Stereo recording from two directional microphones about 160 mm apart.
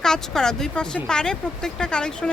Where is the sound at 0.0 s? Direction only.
5° left (ahead or behind).